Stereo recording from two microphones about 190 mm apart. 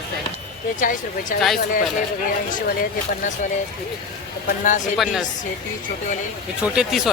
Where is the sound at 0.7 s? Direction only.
45° left (ahead or behind).